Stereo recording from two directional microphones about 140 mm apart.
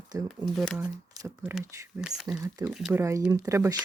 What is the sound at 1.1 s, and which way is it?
Speech, 20° right (ahead or behind).